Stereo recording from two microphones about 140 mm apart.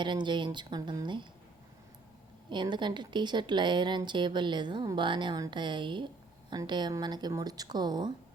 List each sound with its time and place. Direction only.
0.0 s a woman's voice: 35° right (ahead or behind)
2.5 s a woman's voice: 35° right (ahead or behind)